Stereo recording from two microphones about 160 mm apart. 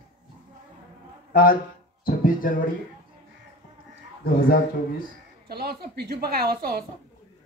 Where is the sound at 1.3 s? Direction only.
60° left (ahead or behind).